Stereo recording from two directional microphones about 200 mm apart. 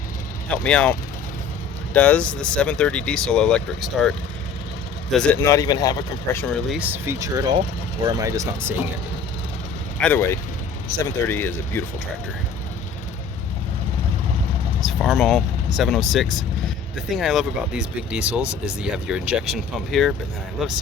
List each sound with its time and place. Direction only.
0.4 s speech: 5° left (ahead or behind)
5.1 s speech: 5° left (ahead or behind)
6.4 s speech: 5° left (ahead or behind)
6.7 s speech: 10° right (ahead or behind)
10.0 s speech: 10° left (ahead or behind)
14.8 s speech: centre (ahead or behind)